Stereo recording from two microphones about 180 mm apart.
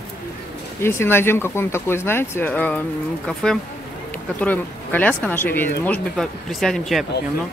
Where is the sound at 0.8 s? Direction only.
15° left (ahead or behind).